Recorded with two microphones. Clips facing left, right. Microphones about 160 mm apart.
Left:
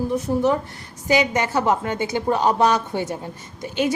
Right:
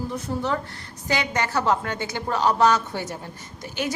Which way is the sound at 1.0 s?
15° left (ahead or behind).